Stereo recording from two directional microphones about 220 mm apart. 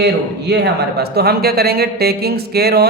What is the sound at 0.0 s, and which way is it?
A man's voice, 50° right (ahead or behind).